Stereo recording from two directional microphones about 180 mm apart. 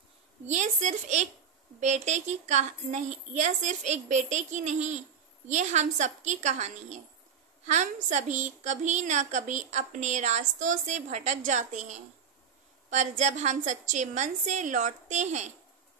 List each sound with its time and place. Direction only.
0.5 s a woman's voice: 40° right (ahead or behind)